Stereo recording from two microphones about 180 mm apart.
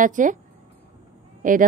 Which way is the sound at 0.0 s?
45° right (ahead or behind).